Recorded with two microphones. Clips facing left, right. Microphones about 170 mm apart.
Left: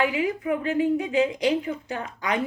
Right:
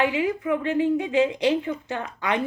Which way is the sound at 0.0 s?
25° right (ahead or behind).